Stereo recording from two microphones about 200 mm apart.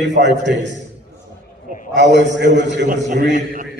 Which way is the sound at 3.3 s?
40° right (ahead or behind).